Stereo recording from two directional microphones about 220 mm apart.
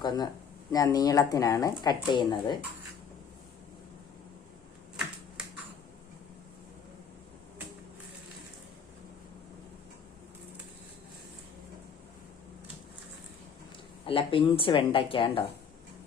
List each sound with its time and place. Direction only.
0.0 s speech: 20° left (ahead or behind)
14.0 s speech: 25° left (ahead or behind)